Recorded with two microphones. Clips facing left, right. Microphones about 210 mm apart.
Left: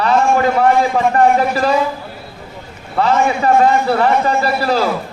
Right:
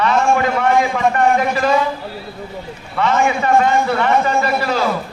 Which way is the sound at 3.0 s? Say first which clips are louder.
Left 2 dB; 35° left (ahead or behind).